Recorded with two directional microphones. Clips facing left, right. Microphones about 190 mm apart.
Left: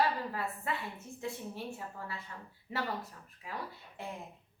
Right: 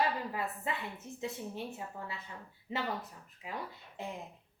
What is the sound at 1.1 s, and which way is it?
A woman's voice, 20° right (ahead or behind).